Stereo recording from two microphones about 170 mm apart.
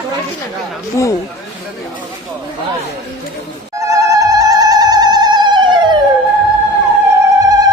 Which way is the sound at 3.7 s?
20° right (ahead or behind).